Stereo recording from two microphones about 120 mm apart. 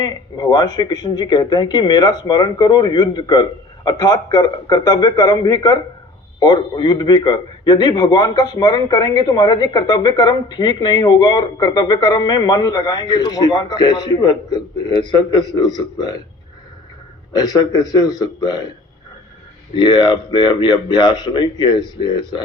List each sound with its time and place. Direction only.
0.0 s a man's voice: 35° left (ahead or behind)
17.3 s a man's voice: 30° left (ahead or behind)
19.7 s a man's voice: 40° left (ahead or behind)